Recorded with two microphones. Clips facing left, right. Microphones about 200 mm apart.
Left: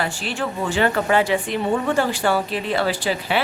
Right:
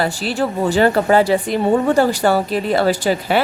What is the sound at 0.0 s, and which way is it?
A woman's voice, 35° right (ahead or behind).